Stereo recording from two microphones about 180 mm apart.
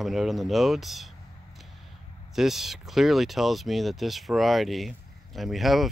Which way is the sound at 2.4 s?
Centre (ahead or behind).